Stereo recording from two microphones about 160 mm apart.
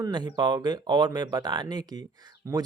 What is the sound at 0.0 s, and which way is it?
Speech, 25° right (ahead or behind).